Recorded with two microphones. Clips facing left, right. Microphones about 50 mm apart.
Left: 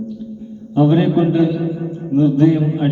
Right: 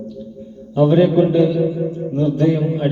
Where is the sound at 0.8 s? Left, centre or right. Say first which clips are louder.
Right 2 dB; left.